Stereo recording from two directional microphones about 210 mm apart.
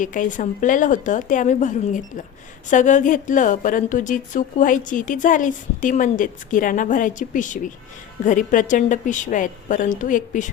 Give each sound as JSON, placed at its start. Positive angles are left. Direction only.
{"t": 0.0, "sound": "a woman's voice", "side_deg": 40}